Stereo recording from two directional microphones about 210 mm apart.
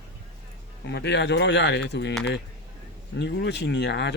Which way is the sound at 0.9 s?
55° left (ahead or behind).